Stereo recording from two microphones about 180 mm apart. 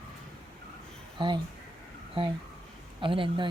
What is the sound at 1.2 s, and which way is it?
Speech, 30° right (ahead or behind).